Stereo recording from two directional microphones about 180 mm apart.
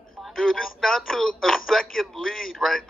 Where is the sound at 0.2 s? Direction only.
Centre (ahead or behind).